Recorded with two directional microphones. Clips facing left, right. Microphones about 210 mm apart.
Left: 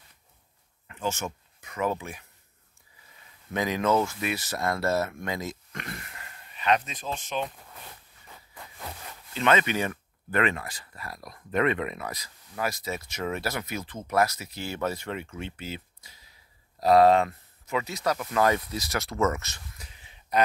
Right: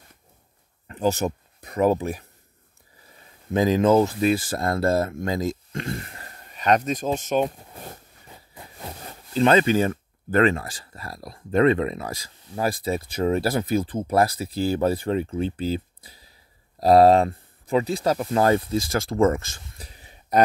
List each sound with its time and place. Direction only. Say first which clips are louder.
0.8 s speech: right 9 dB; 35° right (ahead or behind)
7.5 s speech: right 7 dB; 25° right (ahead or behind)
19.7 s a sound: right 5 dB; 35° right (ahead or behind)